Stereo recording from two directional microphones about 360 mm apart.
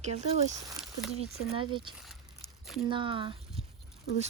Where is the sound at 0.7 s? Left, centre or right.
Centre.